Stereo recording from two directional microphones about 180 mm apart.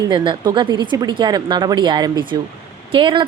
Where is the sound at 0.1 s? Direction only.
25° right (ahead or behind).